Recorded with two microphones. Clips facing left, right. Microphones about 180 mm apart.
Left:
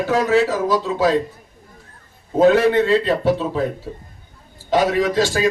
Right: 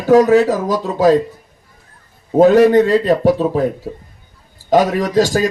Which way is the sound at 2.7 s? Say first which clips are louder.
Right 5 dB; 45° right (ahead or behind).